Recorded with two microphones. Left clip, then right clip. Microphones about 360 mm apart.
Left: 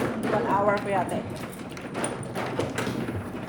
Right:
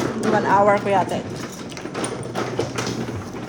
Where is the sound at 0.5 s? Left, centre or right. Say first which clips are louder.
Right 9 dB; right.